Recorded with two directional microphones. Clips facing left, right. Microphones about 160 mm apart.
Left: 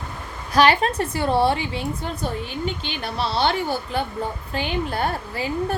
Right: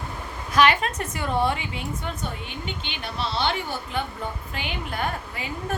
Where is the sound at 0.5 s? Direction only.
35° left (ahead or behind).